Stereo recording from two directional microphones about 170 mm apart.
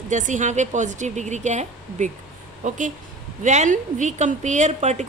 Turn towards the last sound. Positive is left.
turn(degrees=-45)  # may be behind; listen again after turning